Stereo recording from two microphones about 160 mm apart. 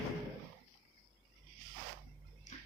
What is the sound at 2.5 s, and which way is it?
Music, 45° left (ahead or behind).